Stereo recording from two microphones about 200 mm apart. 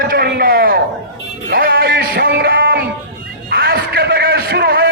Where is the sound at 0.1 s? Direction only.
50° right (ahead or behind).